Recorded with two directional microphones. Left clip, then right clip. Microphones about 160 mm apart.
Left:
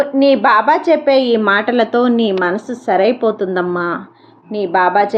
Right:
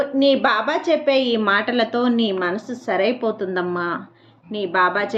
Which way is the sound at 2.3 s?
30° left (ahead or behind).